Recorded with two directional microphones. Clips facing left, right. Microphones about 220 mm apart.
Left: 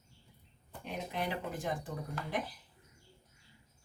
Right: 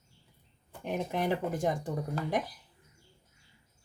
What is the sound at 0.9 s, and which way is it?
Speech, 50° right (ahead or behind).